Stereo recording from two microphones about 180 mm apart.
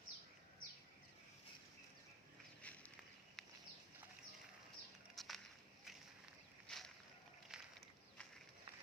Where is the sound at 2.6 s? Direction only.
10° left (ahead or behind).